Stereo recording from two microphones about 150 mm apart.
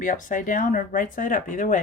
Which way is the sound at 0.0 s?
60° left (ahead or behind).